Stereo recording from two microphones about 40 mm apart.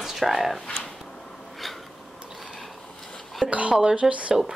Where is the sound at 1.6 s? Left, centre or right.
Centre.